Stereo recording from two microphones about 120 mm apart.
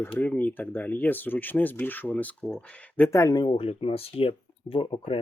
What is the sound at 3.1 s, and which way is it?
Speech, 30° left (ahead or behind).